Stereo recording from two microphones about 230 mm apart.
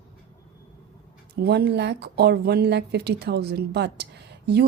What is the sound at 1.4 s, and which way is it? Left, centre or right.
Speech, right.